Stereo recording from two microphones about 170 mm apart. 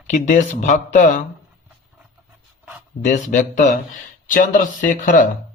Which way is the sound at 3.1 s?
45° left (ahead or behind).